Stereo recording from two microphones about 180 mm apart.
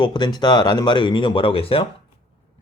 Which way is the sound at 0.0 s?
25° left (ahead or behind).